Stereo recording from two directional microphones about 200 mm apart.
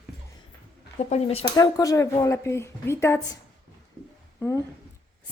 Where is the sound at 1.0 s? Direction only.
30° left (ahead or behind).